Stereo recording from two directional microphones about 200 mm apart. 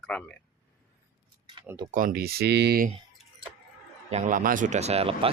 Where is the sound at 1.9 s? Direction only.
45° right (ahead or behind).